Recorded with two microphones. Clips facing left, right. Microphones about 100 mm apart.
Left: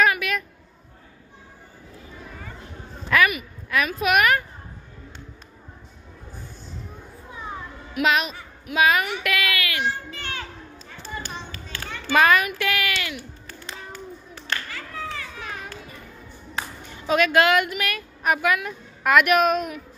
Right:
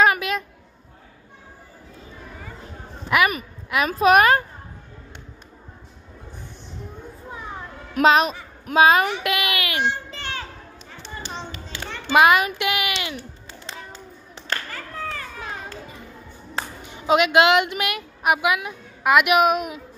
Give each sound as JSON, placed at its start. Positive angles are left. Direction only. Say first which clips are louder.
{"t": 0.0, "sound": "a sound", "louder": "right 2 dB", "side_deg": -30}
{"t": 3.1, "sound": "a sound", "louder": "right 1 dB", "side_deg": -15}
{"t": 3.7, "sound": "a woman's voice", "louder": "right 5 dB", "side_deg": -30}
{"t": 7.9, "sound": "a woman's voice", "louder": "right 5 dB", "side_deg": -35}
{"t": 11.1, "sound": "a sound", "louder": "right 2 dB", "side_deg": -25}
{"t": 12.5, "sound": "clapping", "louder": "right 1 dB", "side_deg": -20}
{"t": 14.5, "sound": "clapping", "louder": "right 1 dB", "side_deg": -40}
{"t": 15.4, "sound": "children playing", "louder": "right 2 dB", "side_deg": -25}
{"t": 16.5, "sound": "a woman's voice", "louder": "right 2 dB", "side_deg": -20}